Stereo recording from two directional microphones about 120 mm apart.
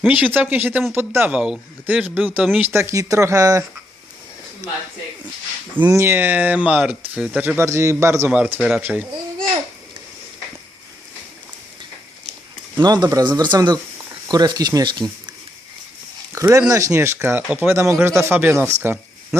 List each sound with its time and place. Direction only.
0.1 s speech: 15° right (ahead or behind)
1.3 s speech: 10° right (ahead or behind); by 3.6 s 30° right (ahead or behind)
5.7 s speech: 20° right (ahead or behind)
8.3 s speech: 10° right (ahead or behind)
12.8 s speech: 35° right (ahead or behind)
16.3 s speech: 25° right (ahead or behind)